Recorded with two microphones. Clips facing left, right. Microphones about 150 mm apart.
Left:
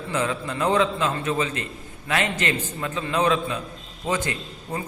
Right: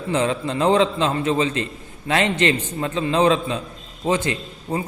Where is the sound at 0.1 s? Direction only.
30° right (ahead or behind).